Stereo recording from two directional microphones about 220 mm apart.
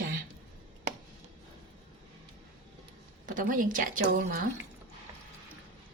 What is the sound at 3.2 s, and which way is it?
A woman's voice, 40° right (ahead or behind).